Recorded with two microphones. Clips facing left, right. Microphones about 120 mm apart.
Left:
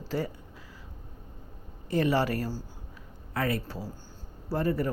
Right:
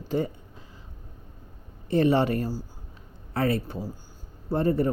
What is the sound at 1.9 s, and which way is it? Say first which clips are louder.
Speech: right 4 dB; 25° right (ahead or behind).